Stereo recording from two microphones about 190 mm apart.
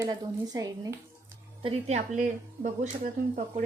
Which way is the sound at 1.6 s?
35° right (ahead or behind).